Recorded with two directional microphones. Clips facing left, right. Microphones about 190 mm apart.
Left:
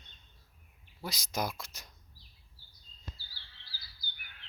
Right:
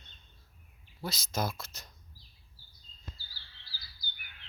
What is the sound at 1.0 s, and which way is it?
Speech, 15° left (ahead or behind).